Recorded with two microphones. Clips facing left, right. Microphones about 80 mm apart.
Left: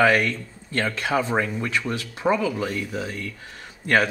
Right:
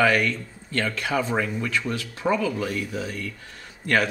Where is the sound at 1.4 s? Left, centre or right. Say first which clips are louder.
Left 1 dB; centre.